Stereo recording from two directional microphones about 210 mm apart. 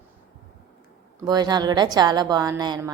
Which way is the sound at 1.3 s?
20° right (ahead or behind).